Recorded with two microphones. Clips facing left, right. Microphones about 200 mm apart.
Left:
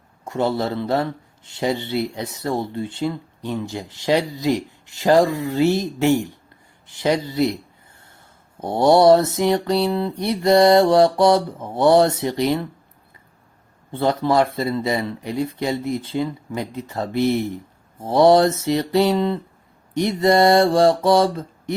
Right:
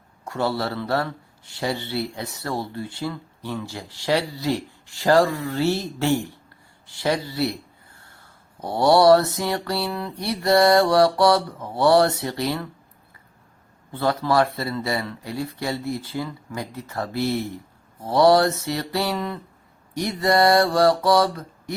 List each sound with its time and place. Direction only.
0.3 s speech: 20° left (ahead or behind)
13.9 s speech: 25° left (ahead or behind)